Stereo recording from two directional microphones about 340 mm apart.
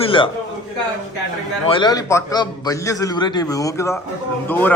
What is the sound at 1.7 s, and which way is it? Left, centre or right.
A man's voice, centre.